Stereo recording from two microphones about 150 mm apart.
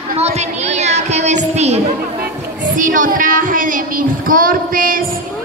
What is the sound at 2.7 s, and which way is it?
A woman's voice, 65° right (ahead or behind).